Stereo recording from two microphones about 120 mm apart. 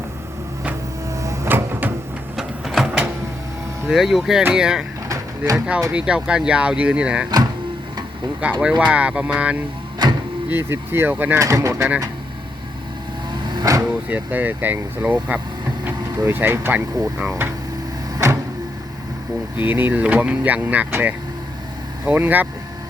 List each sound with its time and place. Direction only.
1.1 s cupboard open or close: 25° right (ahead or behind)
2.3 s printer: 5° right (ahead or behind)
3.8 s speech: 5° right (ahead or behind)
8.4 s speech: 10° right (ahead or behind)
10.0 s vehicle: 35° right (ahead or behind)
10.5 s speech: 20° right (ahead or behind)
11.3 s speech: 25° right (ahead or behind)
13.3 s vehicle: 40° right (ahead or behind)
13.8 s speech: 15° right (ahead or behind)
18.2 s vehicle: 25° right (ahead or behind)
19.5 s speech: 15° right (ahead or behind)